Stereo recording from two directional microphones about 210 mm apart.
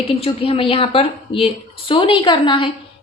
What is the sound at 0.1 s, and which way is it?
A woman's voice, 25° left (ahead or behind).